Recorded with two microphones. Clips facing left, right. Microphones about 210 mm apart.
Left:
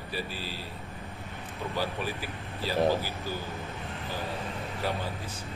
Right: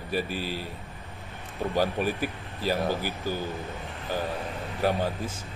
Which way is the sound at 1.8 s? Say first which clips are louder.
Right 7 dB; 50° right (ahead or behind).